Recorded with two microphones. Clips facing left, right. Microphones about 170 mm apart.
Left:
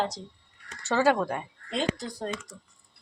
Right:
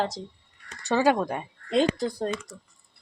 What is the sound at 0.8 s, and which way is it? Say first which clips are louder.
Speech: right 1 dB; 15° right (ahead or behind).